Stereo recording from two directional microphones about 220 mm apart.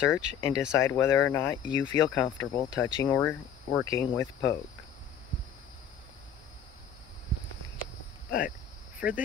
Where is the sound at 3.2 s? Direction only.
5° left (ahead or behind).